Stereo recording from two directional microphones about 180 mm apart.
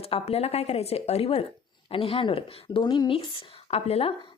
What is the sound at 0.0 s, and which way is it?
A woman's voice, 35° left (ahead or behind).